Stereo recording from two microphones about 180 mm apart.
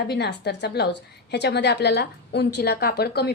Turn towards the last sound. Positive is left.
turn(degrees=65)  # may be behind; listen again after turning